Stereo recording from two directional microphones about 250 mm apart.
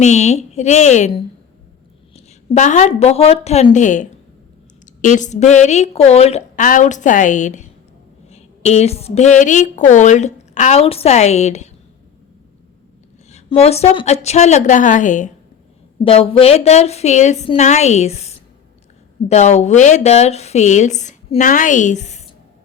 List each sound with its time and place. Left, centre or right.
0.0 s a woman's voice: left
2.1 s a woman's voice: left
13.3 s a woman's voice: left